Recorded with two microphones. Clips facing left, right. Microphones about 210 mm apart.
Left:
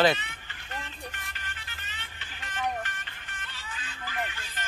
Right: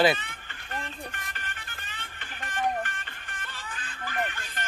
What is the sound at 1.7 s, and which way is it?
Music, 50° right (ahead or behind).